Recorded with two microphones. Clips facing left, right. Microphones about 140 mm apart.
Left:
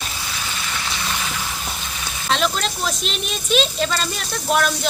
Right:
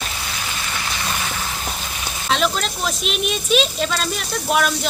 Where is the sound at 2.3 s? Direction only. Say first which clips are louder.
Right 1 dB; centre (ahead or behind).